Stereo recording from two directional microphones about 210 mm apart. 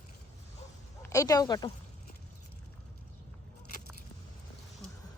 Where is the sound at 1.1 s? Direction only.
15° left (ahead or behind).